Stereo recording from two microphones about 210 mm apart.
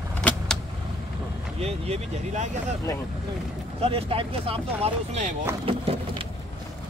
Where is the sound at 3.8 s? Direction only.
25° right (ahead or behind).